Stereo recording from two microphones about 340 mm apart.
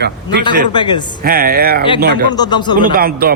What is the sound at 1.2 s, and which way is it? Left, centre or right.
Speech, right.